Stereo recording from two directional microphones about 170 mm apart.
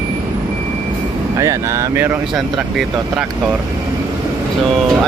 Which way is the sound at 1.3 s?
20° right (ahead or behind).